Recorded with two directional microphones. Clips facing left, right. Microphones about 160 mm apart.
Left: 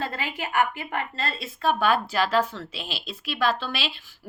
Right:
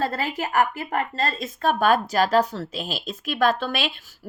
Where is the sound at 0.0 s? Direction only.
40° right (ahead or behind).